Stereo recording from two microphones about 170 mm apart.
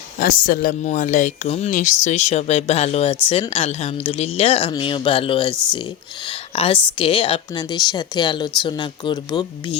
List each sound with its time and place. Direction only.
0.2 s speech: 55° left (ahead or behind); by 9.7 s 30° left (ahead or behind)